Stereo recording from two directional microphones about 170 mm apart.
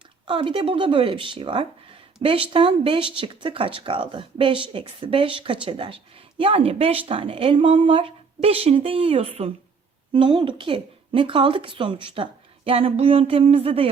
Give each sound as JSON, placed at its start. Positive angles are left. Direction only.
{"t": 0.3, "sound": "speech", "side_deg": -30}